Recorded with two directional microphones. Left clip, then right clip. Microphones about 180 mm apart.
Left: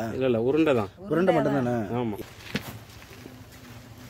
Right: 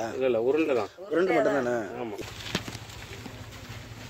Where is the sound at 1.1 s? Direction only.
Centre (ahead or behind).